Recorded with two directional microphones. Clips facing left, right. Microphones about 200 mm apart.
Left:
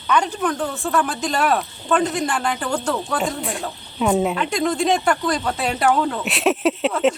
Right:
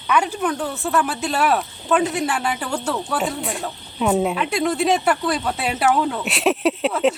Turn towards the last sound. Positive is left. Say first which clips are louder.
# even
turn(degrees=0)  # may be behind; listen again after turning